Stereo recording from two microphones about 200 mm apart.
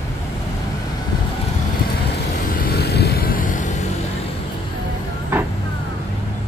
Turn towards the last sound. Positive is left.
turn(degrees=-10)  # may be behind; listen again after turning